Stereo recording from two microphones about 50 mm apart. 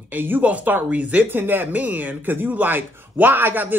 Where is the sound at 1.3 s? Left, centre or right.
Right.